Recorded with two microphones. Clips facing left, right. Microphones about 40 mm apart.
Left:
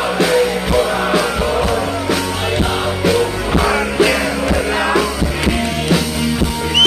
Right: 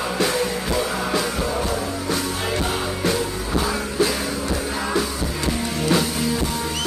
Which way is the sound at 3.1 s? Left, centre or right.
Left.